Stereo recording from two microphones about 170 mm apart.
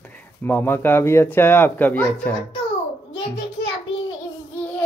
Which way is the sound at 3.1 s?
90° left.